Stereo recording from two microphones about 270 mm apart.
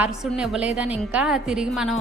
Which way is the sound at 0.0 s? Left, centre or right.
Centre.